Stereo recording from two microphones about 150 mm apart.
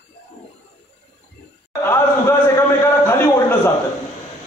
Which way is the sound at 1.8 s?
15° left (ahead or behind).